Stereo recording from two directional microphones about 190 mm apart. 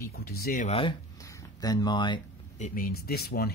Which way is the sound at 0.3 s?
50° left (ahead or behind).